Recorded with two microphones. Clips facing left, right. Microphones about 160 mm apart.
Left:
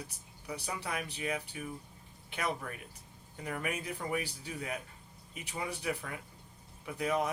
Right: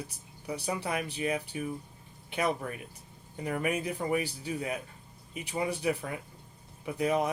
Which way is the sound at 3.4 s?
20° right (ahead or behind).